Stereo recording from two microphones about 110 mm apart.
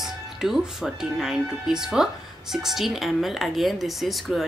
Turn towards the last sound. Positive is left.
turn(degrees=0)  # may be behind; listen again after turning